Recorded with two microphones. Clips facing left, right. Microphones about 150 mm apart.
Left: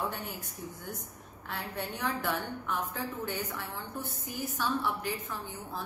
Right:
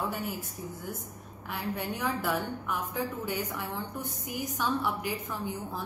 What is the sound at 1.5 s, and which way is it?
A woman's voice, 10° right (ahead or behind).